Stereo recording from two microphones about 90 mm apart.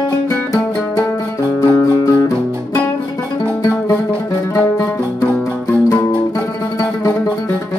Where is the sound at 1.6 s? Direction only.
40° left (ahead or behind).